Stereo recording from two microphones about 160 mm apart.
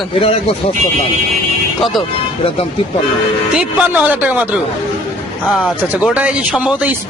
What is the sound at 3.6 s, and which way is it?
A man's voice, 10° right (ahead or behind).